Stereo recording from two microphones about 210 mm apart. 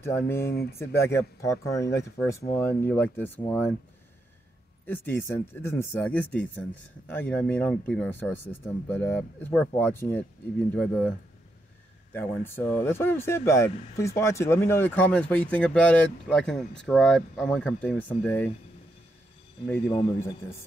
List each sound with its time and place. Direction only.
0.0 s speech: 10° left (ahead or behind)
0.5 s speech: 50° left (ahead or behind)
0.7 s speech: 10° left (ahead or behind)
4.8 s speech: 10° left (ahead or behind)
12.1 s speech: 10° left (ahead or behind)
19.9 s speech: 15° left (ahead or behind)